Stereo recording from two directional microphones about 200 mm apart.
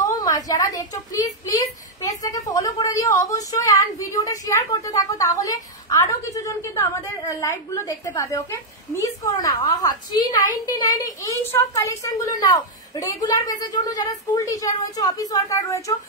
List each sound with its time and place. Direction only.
0.0 s a woman's voice: 15° left (ahead or behind)